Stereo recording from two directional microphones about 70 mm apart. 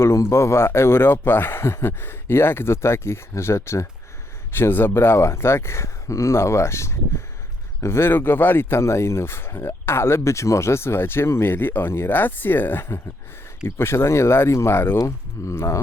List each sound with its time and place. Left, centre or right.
0.0 s speech: left